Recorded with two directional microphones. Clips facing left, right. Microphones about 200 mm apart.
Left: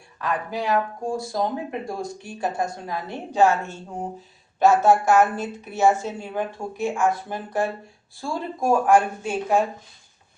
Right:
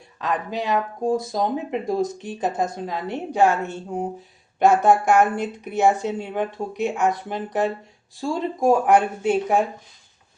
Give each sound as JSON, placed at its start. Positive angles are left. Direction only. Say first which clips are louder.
{"t": 0.2, "sound": "a woman's voice", "louder": "right 1 dB", "side_deg": -20}